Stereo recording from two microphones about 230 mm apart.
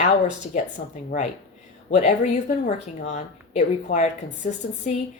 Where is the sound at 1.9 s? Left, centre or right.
Left.